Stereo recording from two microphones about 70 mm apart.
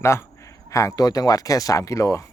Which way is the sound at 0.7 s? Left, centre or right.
Left.